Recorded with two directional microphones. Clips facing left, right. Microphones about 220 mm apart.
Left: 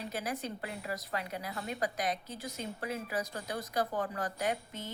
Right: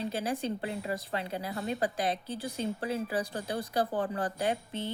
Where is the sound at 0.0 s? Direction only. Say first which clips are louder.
Right 5 dB; 30° right (ahead or behind).